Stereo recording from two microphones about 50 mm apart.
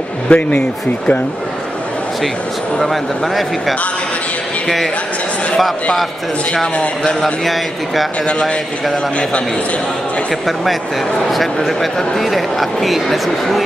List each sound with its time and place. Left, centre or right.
0.3 s speech: left
2.8 s speech: centre
7.4 s speech: centre
8.3 s speech: left
10.4 s speech: centre